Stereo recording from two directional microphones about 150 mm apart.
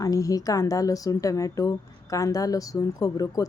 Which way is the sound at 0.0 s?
25° left (ahead or behind).